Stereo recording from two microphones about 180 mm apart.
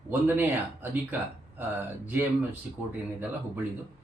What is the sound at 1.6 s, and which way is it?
Speech, 10° right (ahead or behind).